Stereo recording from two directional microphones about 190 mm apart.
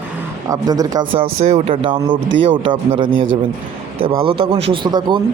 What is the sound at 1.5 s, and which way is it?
A man's voice, 35° right (ahead or behind).